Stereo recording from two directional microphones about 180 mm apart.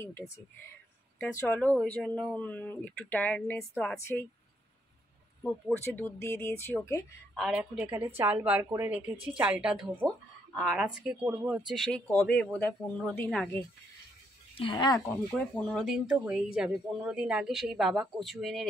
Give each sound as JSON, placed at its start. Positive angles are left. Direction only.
{"t": 0.0, "sound": "a woman's voice", "side_deg": 15}
{"t": 5.4, "sound": "speech", "side_deg": 10}
{"t": 7.3, "sound": "a woman's voice", "side_deg": -5}
{"t": 14.6, "sound": "speech", "side_deg": 25}
{"t": 15.3, "sound": "a woman's voice", "side_deg": 0}